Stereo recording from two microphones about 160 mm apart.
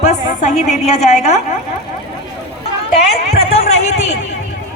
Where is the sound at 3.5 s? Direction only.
40° left (ahead or behind).